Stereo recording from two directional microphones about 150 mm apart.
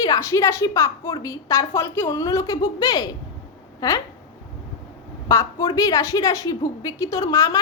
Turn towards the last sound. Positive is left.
turn(degrees=20)  # may be behind; listen again after turning